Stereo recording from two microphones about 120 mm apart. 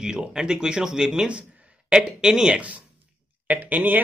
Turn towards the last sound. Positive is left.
turn(degrees=-15)  # may be behind; listen again after turning